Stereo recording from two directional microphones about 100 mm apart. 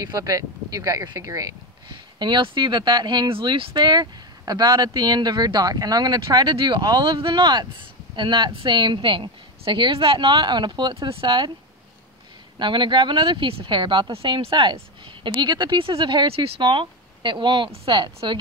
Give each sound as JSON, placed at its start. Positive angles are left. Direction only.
{"t": 0.0, "sound": "speech", "side_deg": -35}
{"t": 1.9, "sound": "speech", "side_deg": -50}
{"t": 12.5, "sound": "speech", "side_deg": -50}
{"t": 14.1, "sound": "speech", "side_deg": -70}